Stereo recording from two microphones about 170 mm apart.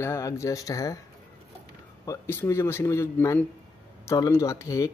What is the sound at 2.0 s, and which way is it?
Speech, 15° left (ahead or behind).